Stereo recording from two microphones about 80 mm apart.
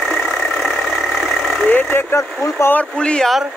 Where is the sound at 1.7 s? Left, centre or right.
Left.